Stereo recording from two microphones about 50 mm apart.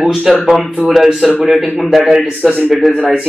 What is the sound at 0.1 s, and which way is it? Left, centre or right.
A man's voice, centre.